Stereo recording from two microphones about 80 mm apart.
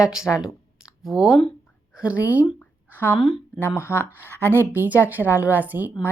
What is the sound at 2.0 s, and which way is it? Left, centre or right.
Speech, centre.